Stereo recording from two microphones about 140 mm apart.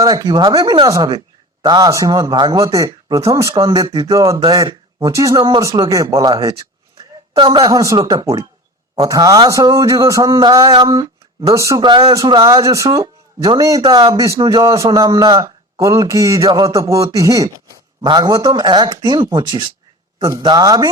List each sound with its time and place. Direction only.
0.0 s a man's voice: 25° right (ahead or behind)
7.3 s speech: 35° right (ahead or behind)
7.8 s a man's voice: 25° right (ahead or behind)
11.8 s a man's voice: 35° right (ahead or behind)
14.6 s a man's voice: 20° right (ahead or behind)